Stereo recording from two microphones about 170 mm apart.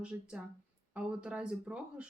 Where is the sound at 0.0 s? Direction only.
5° right (ahead or behind).